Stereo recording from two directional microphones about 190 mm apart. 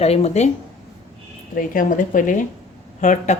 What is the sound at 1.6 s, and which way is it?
Speech, 45° left (ahead or behind).